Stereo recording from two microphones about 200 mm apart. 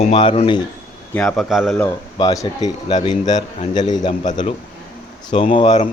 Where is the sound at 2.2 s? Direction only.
20° left (ahead or behind).